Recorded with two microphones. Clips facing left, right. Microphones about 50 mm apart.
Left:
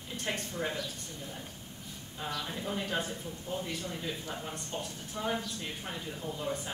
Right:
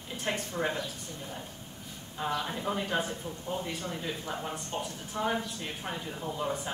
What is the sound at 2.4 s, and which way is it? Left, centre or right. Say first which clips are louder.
Speech: right 3 dB; centre.